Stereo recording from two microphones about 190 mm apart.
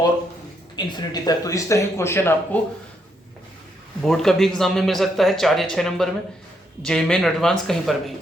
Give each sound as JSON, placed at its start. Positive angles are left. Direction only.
{"t": 0.8, "sound": "speech", "side_deg": 20}
{"t": 4.0, "sound": "a man's voice", "side_deg": 0}